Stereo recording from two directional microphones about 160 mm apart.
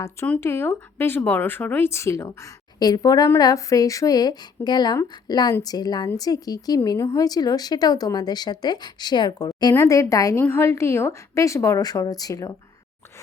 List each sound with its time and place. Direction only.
0.3 s speech: 15° left (ahead or behind)